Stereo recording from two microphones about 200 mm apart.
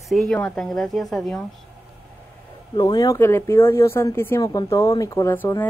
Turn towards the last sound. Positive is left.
turn(degrees=10)  # may be behind; listen again after turning